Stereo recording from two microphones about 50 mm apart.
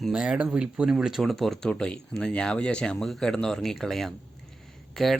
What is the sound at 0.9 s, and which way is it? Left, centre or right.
Speech, centre.